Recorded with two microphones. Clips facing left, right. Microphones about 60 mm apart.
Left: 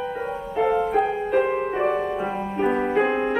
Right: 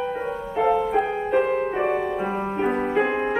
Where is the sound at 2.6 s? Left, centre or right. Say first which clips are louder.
Left 2 dB; centre.